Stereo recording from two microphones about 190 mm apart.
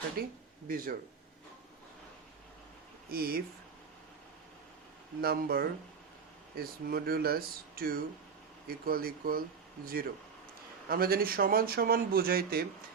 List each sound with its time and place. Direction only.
0.2 s speech: 50° right (ahead or behind)
3.1 s speech: 55° right (ahead or behind)
5.2 s speech: 55° right (ahead or behind)